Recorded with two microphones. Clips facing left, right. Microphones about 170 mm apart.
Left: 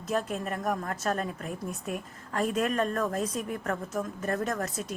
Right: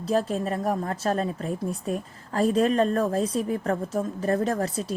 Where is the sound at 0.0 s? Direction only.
30° right (ahead or behind).